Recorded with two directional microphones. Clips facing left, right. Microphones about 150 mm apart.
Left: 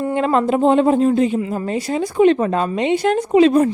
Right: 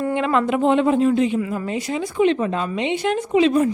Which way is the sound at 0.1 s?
40° left (ahead or behind).